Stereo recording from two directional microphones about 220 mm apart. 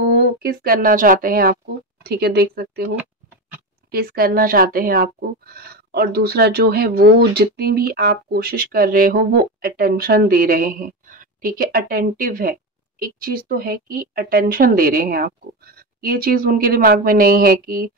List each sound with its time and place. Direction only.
0.4 s a woman's voice: 45° right (ahead or behind)
3.9 s a woman's voice: 40° right (ahead or behind)